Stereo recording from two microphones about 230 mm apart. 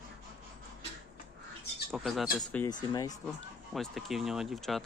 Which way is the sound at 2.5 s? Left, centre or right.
Centre.